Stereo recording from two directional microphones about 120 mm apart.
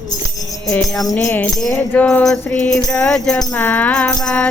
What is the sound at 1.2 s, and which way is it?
Music, 15° left (ahead or behind).